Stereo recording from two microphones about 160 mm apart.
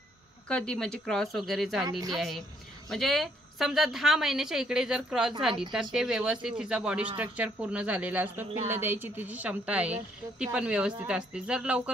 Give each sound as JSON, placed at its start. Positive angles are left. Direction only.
{"t": 0.5, "sound": "a woman's voice", "side_deg": 5}
{"t": 1.9, "sound": "speech", "side_deg": -25}
{"t": 2.1, "sound": "a woman's voice", "side_deg": 0}